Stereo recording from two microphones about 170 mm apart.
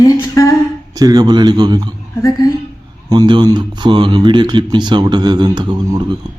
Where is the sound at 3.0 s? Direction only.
25° right (ahead or behind).